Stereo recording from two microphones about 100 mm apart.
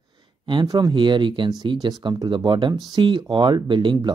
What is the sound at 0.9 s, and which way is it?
Speech, 55° right (ahead or behind).